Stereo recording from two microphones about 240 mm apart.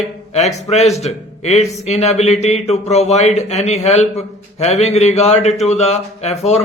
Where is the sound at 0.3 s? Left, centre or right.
Left.